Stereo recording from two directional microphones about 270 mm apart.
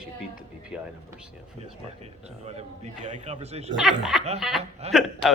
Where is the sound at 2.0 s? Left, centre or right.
Right.